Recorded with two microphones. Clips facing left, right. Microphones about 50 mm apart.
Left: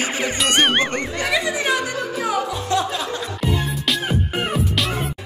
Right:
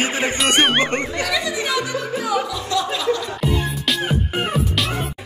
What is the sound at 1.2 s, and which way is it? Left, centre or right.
Music, left.